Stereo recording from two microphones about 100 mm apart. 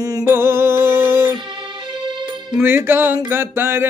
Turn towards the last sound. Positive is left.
turn(degrees=-25)  # may be behind; listen again after turning